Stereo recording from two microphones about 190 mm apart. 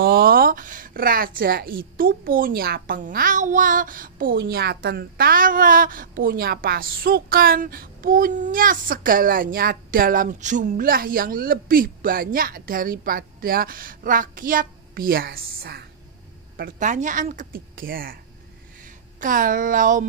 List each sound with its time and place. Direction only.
0.0 s a woman's voice: 50° right (ahead or behind)
16.5 s a woman's voice: 45° right (ahead or behind)